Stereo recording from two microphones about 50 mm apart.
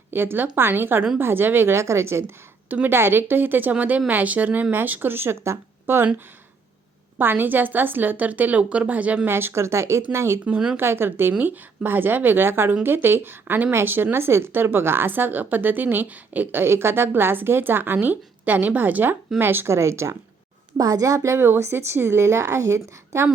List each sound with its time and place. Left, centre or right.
0.1 s a woman's voice: right
1.7 s speech: right
2.6 s a woman's voice: right
2.9 s a woman's voice: right
7.2 s a woman's voice: right
9.2 s a woman's voice: right
11.3 s a woman's voice: right
14.5 s a woman's voice: right
17.9 s a woman's voice: right
19.6 s speech: right
20.7 s a woman's voice: right
21.2 s speech: right